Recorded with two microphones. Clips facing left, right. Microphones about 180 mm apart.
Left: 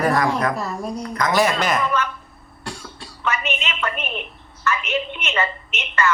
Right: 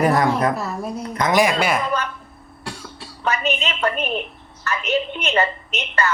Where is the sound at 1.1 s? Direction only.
20° right (ahead or behind).